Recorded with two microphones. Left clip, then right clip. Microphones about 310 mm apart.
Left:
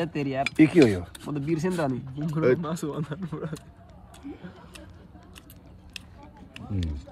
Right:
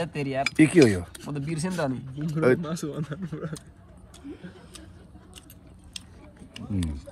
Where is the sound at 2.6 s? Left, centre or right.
Left.